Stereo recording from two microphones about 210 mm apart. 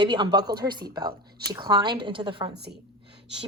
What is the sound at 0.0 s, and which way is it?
Speech, 20° right (ahead or behind).